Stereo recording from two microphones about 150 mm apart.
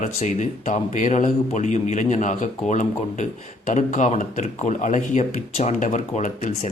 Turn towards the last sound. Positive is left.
turn(degrees=50)  # may be behind; listen again after turning